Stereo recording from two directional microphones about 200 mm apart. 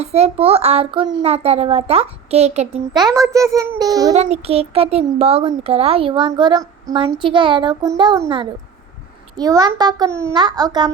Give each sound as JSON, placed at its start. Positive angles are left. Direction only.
{"t": 0.0, "sound": "a child's voice", "side_deg": -30}
{"t": 2.9, "sound": "a child's voice", "side_deg": -20}
{"t": 4.1, "sound": "speech", "side_deg": -35}